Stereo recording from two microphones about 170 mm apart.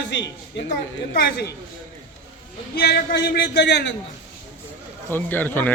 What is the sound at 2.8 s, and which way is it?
A man's voice, 65° left (ahead or behind).